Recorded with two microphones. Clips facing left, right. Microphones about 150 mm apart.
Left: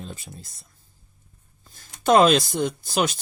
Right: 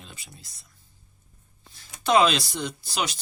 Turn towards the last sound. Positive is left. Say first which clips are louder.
# left 6 dB
turn(degrees=50)  # may be behind; listen again after turning